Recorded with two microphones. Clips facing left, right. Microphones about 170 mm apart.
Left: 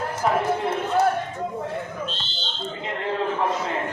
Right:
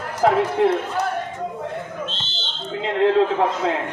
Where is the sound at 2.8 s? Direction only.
80° right.